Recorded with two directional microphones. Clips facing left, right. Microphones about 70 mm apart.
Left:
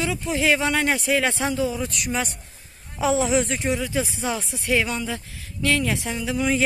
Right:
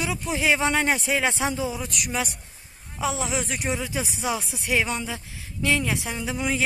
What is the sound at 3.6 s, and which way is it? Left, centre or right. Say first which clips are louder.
Speech: left 4 dB; centre.